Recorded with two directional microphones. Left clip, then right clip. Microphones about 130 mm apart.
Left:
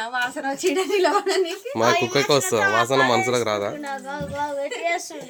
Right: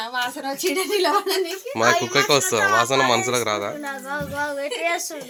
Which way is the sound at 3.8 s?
90° right.